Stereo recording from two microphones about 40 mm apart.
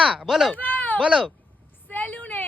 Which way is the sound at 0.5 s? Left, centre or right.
Left.